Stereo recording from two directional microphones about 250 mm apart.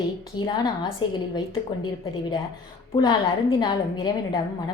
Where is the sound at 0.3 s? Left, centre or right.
Centre.